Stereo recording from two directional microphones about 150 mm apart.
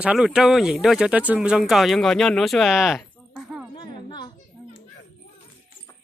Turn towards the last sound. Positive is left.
turn(degrees=30)  # may be behind; listen again after turning